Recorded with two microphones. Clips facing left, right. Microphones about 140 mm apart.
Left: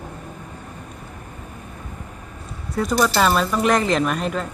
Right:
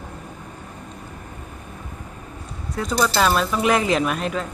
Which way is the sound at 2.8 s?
5° left (ahead or behind).